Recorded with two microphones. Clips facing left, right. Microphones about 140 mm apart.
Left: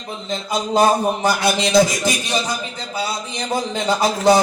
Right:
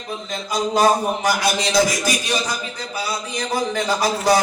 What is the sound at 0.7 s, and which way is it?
Speech, 25° left (ahead or behind).